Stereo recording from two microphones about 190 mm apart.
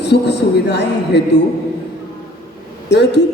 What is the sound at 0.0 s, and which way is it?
A man's voice, 65° left (ahead or behind).